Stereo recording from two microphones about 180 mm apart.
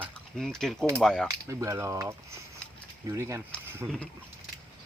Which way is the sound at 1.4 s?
15° right (ahead or behind).